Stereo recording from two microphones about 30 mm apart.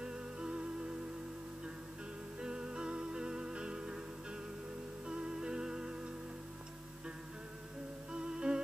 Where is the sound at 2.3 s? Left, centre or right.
Right.